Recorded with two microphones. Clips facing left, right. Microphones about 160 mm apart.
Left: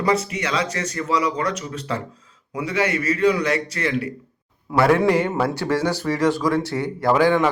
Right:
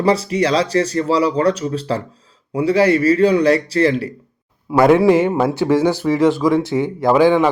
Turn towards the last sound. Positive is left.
turn(degrees=-15)  # may be behind; listen again after turning